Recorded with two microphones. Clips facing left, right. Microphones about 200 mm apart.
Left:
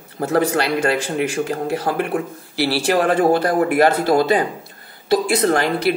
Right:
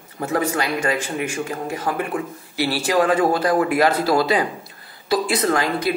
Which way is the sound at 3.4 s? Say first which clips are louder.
Left 2 dB; 50° left (ahead or behind).